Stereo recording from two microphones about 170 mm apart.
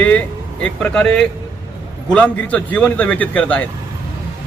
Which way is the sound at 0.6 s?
5° left (ahead or behind).